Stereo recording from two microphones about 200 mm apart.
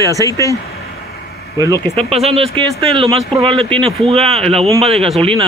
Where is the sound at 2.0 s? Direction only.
30° right (ahead or behind).